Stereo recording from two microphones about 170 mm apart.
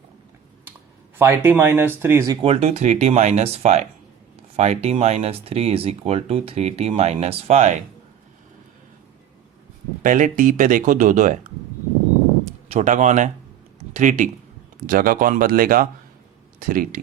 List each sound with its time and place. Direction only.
1.2 s speech: 15° right (ahead or behind)
2.4 s speech: 40° right (ahead or behind)
10.0 s speech: 50° right (ahead or behind)
12.8 s speech: 45° right (ahead or behind)